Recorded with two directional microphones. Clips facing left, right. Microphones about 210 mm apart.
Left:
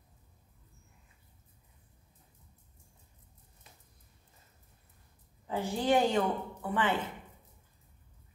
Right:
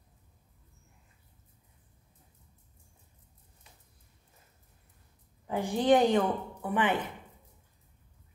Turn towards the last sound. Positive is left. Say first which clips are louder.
# right 2 dB
turn(degrees=-15)  # may be behind; listen again after turning